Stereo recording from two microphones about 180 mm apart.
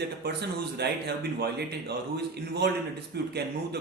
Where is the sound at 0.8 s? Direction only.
65° right (ahead or behind).